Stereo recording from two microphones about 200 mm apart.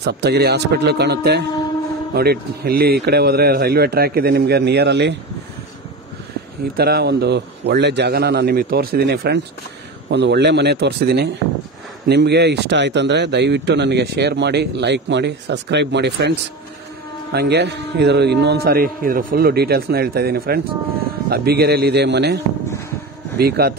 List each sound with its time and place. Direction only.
0.0 s a man's voice: 55° right (ahead or behind)
6.8 s a man's voice: 50° right (ahead or behind)